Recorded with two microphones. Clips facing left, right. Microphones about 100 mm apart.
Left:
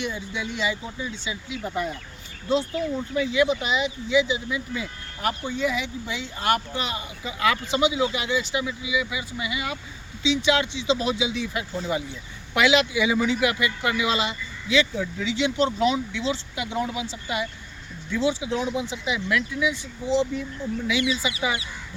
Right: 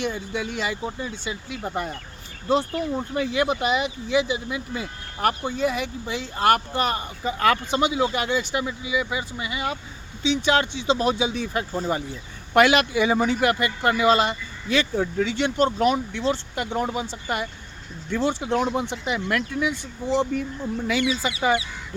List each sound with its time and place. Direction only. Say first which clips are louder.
0.0 s speech: right 3 dB; 50° right (ahead or behind)
12.5 s speech: right 3 dB; 55° right (ahead or behind)